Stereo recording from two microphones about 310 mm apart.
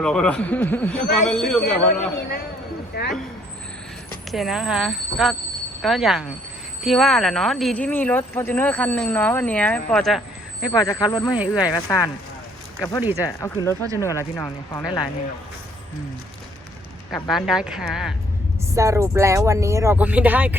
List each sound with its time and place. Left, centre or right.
0.0 s speech: centre
2.9 s speech: left
4.3 s speech: centre
11.3 s speech: centre
11.6 s speech: centre
13.1 s speech: centre
17.1 s speech: centre